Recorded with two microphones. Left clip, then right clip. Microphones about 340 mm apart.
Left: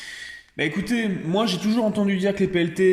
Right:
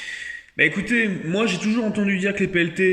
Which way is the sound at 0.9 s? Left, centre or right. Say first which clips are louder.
Right 2 dB; centre.